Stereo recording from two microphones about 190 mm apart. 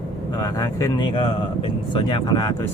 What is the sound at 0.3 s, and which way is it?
Speech, 20° left (ahead or behind).